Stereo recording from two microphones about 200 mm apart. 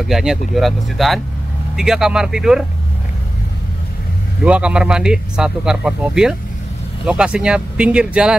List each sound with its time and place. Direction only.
0.1 s speech: centre (ahead or behind)
4.5 s speech: 5° right (ahead or behind)